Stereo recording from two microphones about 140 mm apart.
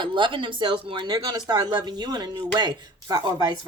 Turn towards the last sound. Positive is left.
turn(degrees=-30)  # may be behind; listen again after turning